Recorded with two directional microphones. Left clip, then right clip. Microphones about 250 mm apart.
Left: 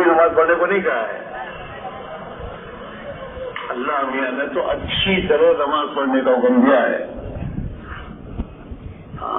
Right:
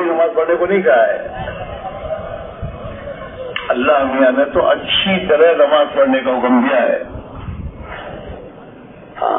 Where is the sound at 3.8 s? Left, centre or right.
Right.